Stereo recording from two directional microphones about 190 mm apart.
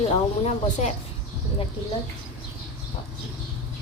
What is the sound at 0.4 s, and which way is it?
Speech, 35° left (ahead or behind).